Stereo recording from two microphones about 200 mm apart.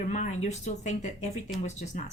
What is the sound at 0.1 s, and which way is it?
Speech, 35° left (ahead or behind).